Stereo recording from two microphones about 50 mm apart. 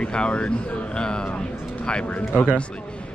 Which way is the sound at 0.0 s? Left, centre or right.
Centre.